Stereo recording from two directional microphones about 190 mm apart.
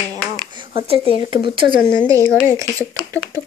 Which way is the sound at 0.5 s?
25° right (ahead or behind).